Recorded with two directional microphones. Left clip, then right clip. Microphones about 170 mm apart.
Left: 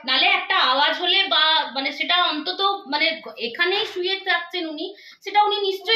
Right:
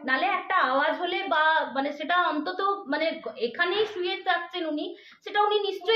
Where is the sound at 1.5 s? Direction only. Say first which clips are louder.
Left 4 dB; 45° right (ahead or behind).